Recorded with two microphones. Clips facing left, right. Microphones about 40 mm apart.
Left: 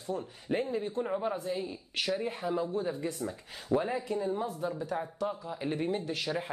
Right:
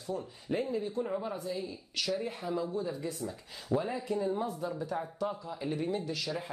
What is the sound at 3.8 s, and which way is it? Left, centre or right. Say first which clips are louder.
Speech: left 1 dB; left.